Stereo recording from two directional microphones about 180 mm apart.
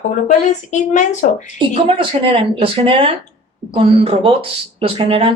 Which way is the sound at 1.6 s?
30° right (ahead or behind).